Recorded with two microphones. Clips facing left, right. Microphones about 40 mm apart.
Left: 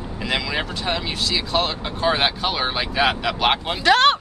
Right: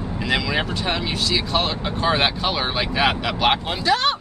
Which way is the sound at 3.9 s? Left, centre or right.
Left.